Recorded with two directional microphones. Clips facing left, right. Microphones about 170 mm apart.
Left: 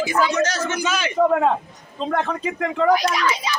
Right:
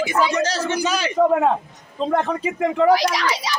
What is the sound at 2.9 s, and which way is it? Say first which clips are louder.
Speech: right 1 dB; 85° right.